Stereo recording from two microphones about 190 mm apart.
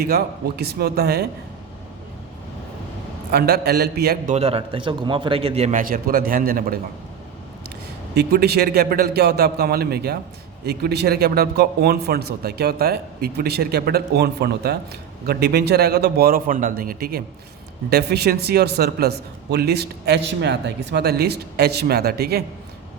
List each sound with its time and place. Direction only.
0.0 s a man's voice: 55° right (ahead or behind)
3.3 s a man's voice: 55° right (ahead or behind)
4.4 s a man's voice: 30° right (ahead or behind); by 6.7 s 50° right (ahead or behind)
8.1 s a man's voice: 60° right (ahead or behind)